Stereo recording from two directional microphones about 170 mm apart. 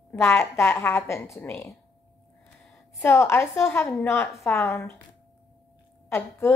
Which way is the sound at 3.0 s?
15° left (ahead or behind).